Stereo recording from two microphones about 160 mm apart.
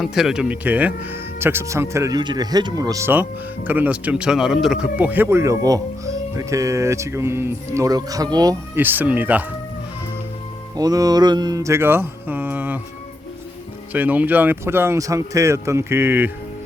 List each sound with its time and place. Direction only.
0.0 s speech: centre (ahead or behind); by 8.5 s 25° right (ahead or behind)
8.7 s speech: 10° right (ahead or behind)
10.8 s speech: 25° right (ahead or behind)
13.9 s speech: 10° right (ahead or behind)